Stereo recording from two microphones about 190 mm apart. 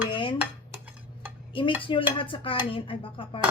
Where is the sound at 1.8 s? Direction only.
25° left (ahead or behind).